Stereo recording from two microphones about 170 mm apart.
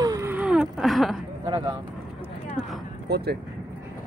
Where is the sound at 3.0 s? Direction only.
75° right (ahead or behind).